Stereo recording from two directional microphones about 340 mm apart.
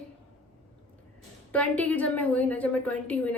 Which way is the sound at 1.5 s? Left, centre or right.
Centre.